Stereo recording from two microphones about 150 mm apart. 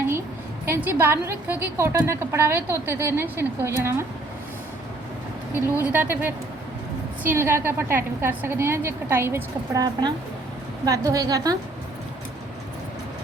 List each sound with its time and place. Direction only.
0.6 s a woman's voice: 15° right (ahead or behind)
5.9 s a woman's voice: 10° right (ahead or behind)